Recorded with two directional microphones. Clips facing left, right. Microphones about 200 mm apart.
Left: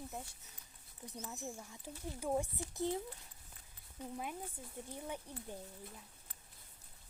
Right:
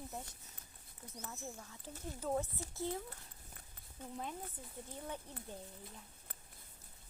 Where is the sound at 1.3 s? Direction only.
15° left (ahead or behind).